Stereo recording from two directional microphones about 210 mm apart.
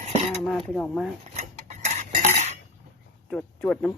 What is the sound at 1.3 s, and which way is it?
Cutlery, 35° right (ahead or behind).